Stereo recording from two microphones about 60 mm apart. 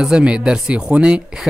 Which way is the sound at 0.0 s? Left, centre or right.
Centre.